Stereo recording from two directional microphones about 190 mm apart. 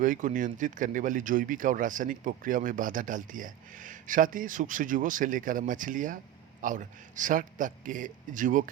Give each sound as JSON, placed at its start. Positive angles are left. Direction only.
{"t": 0.0, "sound": "speech", "side_deg": -45}